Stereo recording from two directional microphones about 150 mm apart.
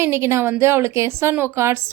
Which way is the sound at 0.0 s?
20° right (ahead or behind).